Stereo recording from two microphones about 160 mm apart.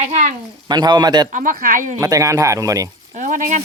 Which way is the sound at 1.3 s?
60° right (ahead or behind).